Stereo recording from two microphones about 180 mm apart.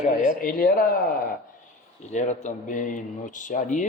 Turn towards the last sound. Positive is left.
turn(degrees=45)  # may be behind; listen again after turning